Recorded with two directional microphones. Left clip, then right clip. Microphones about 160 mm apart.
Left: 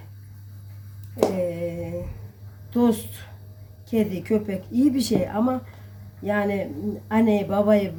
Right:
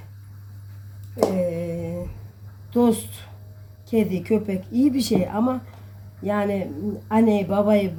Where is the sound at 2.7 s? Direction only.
15° right (ahead or behind).